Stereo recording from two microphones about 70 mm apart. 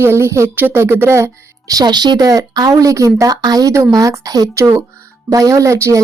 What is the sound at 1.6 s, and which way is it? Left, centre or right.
Speech, right.